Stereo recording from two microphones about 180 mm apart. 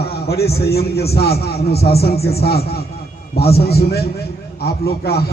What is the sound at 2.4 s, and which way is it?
A man's voice, 60° left (ahead or behind).